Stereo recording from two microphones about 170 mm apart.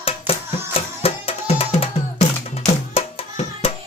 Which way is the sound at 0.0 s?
35° left (ahead or behind).